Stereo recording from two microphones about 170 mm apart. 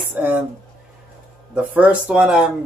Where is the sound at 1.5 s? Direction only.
5° right (ahead or behind).